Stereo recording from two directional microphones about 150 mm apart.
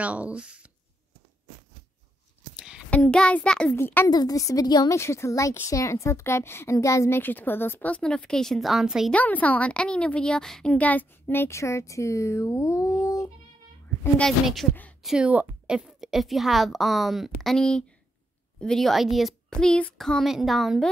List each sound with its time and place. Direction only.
0.0 s speech: 10° right (ahead or behind)
2.5 s a sound: 5° right (ahead or behind)
2.9 s a woman's voice: 5° left (ahead or behind)
9.1 s a woman's voice: 10° left (ahead or behind)
14.1 s a woman's voice: centre (ahead or behind)